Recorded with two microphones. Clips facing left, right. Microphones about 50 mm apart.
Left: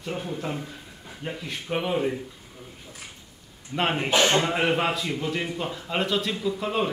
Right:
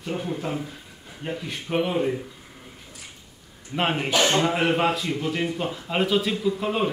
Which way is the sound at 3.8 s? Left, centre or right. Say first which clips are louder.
Even; centre.